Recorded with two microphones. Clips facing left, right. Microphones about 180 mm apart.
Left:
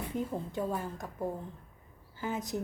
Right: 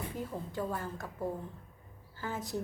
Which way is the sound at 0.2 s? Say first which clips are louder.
Left 4 dB; 20° left (ahead or behind).